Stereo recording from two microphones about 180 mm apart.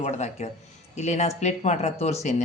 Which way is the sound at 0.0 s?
35° left (ahead or behind).